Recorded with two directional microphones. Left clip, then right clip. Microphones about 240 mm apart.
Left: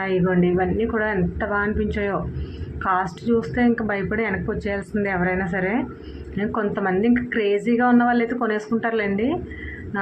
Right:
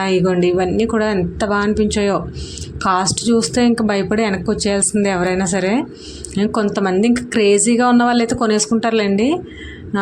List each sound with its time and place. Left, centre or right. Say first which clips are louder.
0.0 s a woman's voice: right 6 dB; right